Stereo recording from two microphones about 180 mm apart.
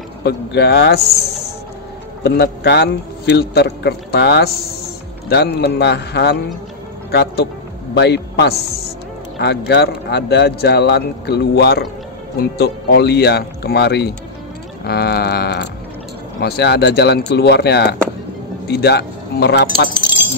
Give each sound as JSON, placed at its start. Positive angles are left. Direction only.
{"t": 0.2, "sound": "a man's voice", "side_deg": 65}
{"t": 2.2, "sound": "a man's voice", "side_deg": 65}
{"t": 14.9, "sound": "sheep", "side_deg": 60}
{"t": 16.3, "sound": "speech", "side_deg": 65}